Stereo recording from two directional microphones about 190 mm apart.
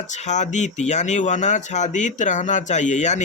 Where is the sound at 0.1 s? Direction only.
40° left (ahead or behind).